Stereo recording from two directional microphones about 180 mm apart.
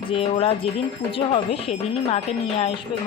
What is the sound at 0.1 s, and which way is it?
Speech, 30° left (ahead or behind).